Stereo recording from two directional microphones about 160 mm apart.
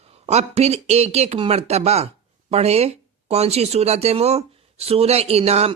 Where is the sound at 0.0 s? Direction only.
40° right (ahead or behind).